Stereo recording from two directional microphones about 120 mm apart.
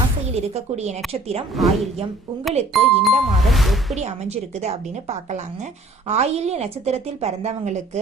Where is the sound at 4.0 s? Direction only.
65° right (ahead or behind).